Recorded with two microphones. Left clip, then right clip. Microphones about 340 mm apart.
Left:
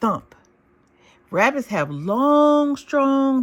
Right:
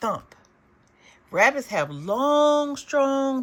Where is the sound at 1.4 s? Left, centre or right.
Centre.